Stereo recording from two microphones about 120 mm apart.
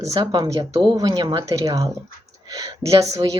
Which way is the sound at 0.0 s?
30° right (ahead or behind).